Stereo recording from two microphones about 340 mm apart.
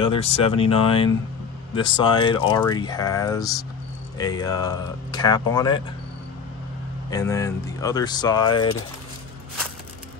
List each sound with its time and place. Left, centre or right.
0.0 s speech: centre
7.1 s speech: centre